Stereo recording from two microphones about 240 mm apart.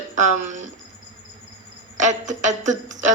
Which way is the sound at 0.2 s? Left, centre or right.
Right.